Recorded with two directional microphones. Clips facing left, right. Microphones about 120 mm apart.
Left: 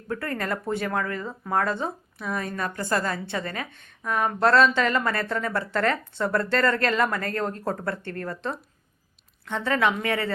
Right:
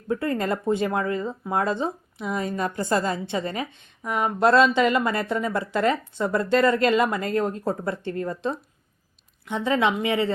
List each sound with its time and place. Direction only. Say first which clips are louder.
0.1 s speech: right 4 dB; 20° right (ahead or behind)